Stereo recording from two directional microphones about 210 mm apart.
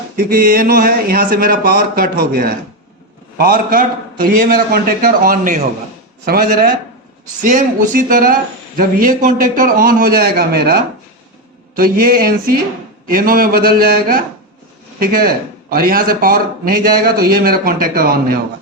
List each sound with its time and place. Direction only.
0.2 s speech: 45° right (ahead or behind)
7.4 s a sound: 40° right (ahead or behind)
8.8 s speech: 40° right (ahead or behind)